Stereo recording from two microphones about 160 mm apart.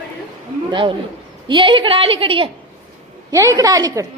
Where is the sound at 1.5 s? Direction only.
30° right (ahead or behind).